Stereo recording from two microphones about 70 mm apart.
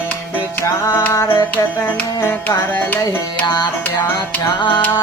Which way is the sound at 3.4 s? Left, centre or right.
Left.